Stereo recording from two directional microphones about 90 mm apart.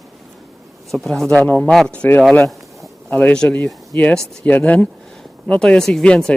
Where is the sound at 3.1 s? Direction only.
15° left (ahead or behind).